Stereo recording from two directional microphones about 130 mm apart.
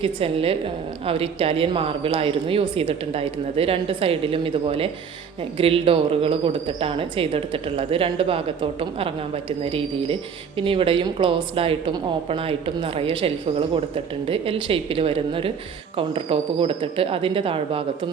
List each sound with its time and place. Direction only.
0.0 s a woman's voice: 45° right (ahead or behind)